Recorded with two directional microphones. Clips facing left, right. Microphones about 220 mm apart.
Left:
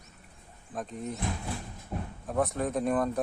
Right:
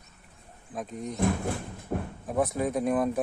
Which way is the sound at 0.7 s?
Centre (ahead or behind).